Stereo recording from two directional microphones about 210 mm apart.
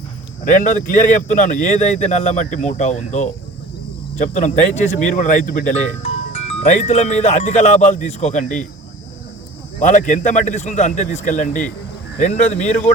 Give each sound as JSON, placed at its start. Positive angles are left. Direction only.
{"t": 0.4, "sound": "a man's voice", "side_deg": 40}
{"t": 9.8, "sound": "a man's voice", "side_deg": 35}